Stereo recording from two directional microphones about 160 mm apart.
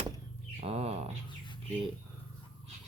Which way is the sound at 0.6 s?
40° right (ahead or behind).